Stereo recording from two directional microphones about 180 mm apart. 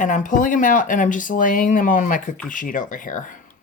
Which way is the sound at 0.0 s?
45° left (ahead or behind).